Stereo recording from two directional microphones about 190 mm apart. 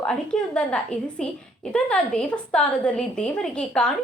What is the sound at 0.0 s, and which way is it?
A woman's voice, 5° left (ahead or behind).